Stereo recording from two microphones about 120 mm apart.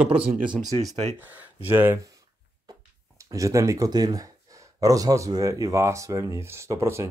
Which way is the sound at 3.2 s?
30° right (ahead or behind).